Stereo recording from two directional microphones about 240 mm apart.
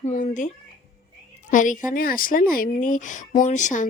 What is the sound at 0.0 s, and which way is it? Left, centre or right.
Speech, left.